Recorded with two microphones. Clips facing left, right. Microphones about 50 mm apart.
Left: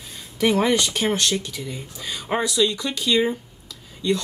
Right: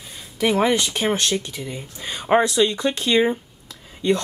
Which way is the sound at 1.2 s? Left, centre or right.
Centre.